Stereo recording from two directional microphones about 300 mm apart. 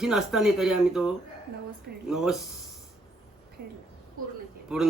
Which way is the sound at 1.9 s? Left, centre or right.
Right.